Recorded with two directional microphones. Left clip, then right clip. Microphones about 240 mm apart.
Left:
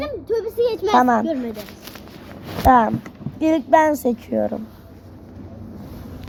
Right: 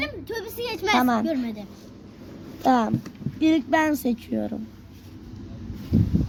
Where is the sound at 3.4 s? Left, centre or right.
Centre.